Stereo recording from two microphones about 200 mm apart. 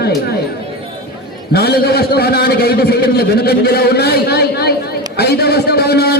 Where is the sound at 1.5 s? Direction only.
50° left (ahead or behind).